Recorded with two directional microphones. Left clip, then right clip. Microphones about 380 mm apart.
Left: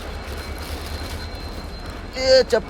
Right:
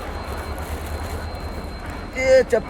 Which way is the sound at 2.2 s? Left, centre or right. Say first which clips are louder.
Even; centre.